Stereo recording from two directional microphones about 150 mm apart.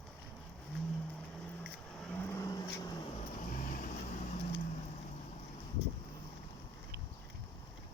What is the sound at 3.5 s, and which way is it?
Vehicle, 65° left (ahead or behind).